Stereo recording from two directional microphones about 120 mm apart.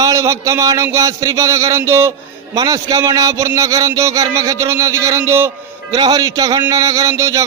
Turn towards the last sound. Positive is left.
turn(degrees=-25)  # may be behind; listen again after turning